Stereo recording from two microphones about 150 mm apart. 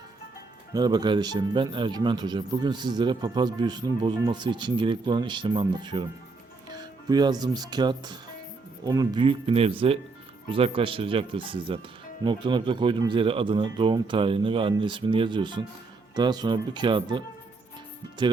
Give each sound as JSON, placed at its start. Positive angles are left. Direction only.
{"t": 0.7, "sound": "speech", "side_deg": -25}
{"t": 7.1, "sound": "speech", "side_deg": -25}